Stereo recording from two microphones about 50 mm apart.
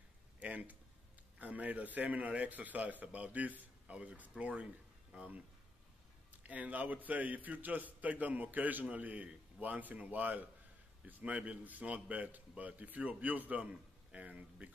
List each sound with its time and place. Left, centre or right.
0.4 s a man's voice: right
6.4 s a man's voice: right